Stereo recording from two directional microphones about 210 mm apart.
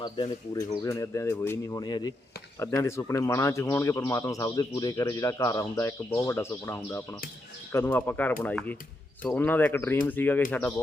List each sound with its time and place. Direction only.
0.0 s speech: 20° left (ahead or behind)